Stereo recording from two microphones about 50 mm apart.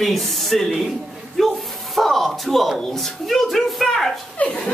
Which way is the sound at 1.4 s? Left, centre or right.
Centre.